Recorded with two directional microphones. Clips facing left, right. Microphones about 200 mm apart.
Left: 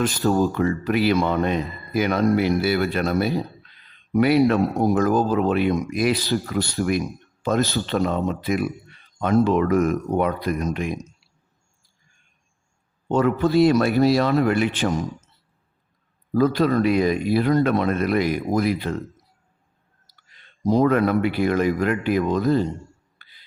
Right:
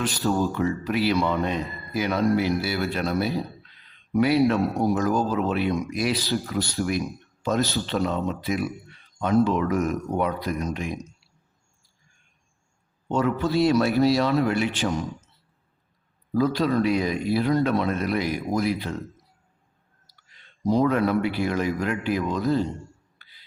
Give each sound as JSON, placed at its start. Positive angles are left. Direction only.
{"t": 0.0, "sound": "speech", "side_deg": 40}
{"t": 0.6, "sound": "a man's voice", "side_deg": 55}
{"t": 13.1, "sound": "a man's voice", "side_deg": 55}
{"t": 16.3, "sound": "speech", "side_deg": 55}
{"t": 20.7, "sound": "a man's voice", "side_deg": 50}